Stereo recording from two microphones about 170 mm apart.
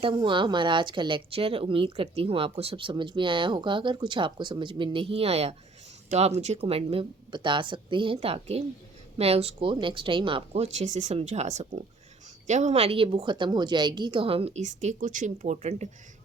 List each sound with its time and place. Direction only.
0.0 s a woman's voice: 30° right (ahead or behind)